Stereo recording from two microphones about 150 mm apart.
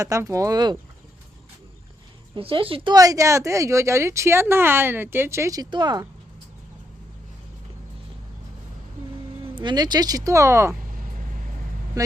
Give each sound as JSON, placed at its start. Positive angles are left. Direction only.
{"t": 0.0, "sound": "speech", "side_deg": -20}
{"t": 2.3, "sound": "speech", "side_deg": -35}
{"t": 9.4, "sound": "speech", "side_deg": -30}
{"t": 12.0, "sound": "vehicle", "side_deg": -25}